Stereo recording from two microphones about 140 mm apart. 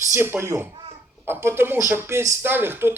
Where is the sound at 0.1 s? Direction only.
15° right (ahead or behind).